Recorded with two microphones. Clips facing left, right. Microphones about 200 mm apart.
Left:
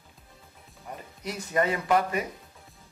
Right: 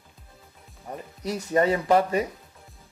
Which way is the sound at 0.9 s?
35° right (ahead or behind).